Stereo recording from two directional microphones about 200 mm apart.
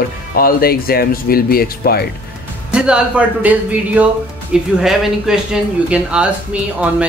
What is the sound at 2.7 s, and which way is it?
Speech, 5° right (ahead or behind).